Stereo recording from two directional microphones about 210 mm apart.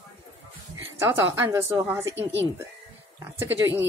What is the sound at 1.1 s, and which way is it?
Speech, 10° right (ahead or behind).